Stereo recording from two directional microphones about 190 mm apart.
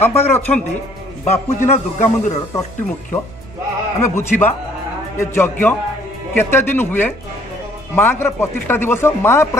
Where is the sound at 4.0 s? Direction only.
10° left (ahead or behind).